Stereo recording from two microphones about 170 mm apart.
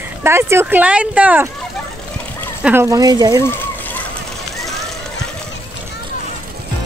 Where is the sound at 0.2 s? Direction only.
15° right (ahead or behind).